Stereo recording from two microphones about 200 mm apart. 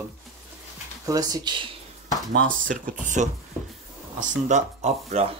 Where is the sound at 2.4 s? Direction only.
45° right (ahead or behind).